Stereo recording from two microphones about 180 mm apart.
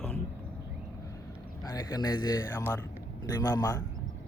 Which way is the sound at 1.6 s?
20° left (ahead or behind).